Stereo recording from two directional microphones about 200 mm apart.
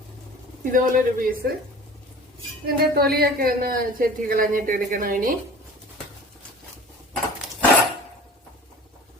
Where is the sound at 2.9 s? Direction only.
50° right (ahead or behind).